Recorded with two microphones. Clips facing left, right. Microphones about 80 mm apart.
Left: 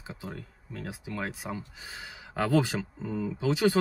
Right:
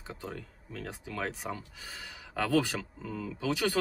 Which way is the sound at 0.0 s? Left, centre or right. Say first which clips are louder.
Even; centre.